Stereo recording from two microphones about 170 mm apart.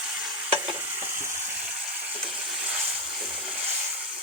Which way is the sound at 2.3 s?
5° right (ahead or behind).